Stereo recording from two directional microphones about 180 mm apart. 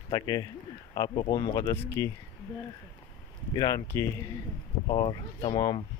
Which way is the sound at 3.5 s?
20° left (ahead or behind).